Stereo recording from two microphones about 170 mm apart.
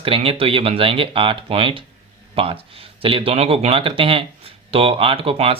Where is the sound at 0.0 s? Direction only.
35° right (ahead or behind).